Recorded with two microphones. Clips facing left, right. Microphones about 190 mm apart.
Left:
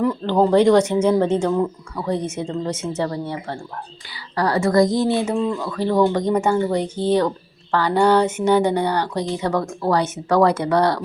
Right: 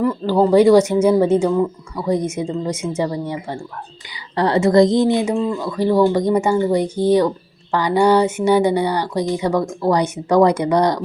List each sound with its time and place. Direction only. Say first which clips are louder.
0.0 s a woman's voice: right 2 dB; 5° right (ahead or behind)